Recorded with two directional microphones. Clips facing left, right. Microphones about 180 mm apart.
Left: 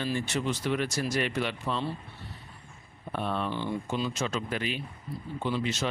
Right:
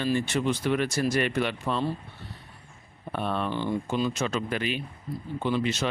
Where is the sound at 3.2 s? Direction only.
60° right (ahead or behind).